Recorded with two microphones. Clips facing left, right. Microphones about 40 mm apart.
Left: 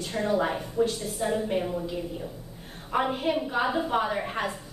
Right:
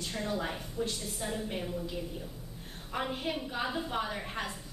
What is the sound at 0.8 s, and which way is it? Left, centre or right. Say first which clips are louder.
A woman's voice: left 9 dB; centre.